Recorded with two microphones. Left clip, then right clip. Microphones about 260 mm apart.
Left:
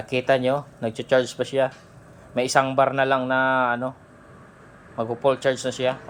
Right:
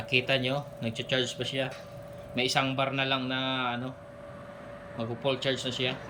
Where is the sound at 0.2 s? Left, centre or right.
Centre.